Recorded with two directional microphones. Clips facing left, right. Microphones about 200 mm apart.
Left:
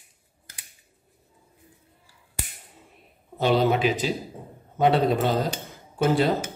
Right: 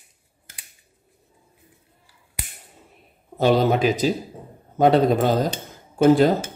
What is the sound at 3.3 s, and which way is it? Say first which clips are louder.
Speech: right 3 dB; 45° right (ahead or behind).